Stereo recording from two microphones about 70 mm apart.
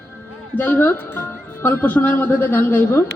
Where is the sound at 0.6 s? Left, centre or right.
Left.